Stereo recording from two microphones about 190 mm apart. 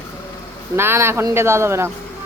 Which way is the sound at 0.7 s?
10° right (ahead or behind).